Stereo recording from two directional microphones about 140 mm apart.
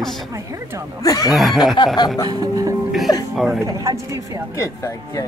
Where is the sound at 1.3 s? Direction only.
Centre (ahead or behind).